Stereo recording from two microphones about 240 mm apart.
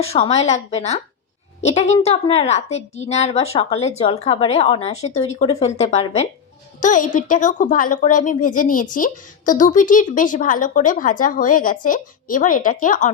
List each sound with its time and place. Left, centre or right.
0.0 s a woman's voice: left